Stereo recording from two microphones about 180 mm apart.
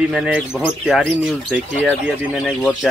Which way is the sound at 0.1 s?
5° right (ahead or behind).